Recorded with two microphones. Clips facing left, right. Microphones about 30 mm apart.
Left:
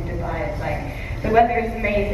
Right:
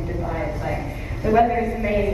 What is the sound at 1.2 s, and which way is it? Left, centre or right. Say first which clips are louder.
Speech: left 1 dB; centre.